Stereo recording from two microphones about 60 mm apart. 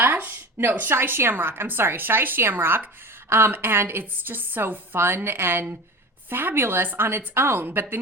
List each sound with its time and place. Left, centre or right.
0.0 s a woman's voice: right
4.9 s a woman's voice: right